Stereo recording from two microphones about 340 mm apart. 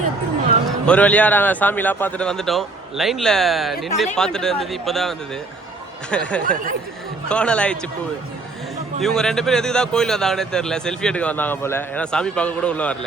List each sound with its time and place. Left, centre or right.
0.9 s a man's voice: centre
9.0 s a man's voice: centre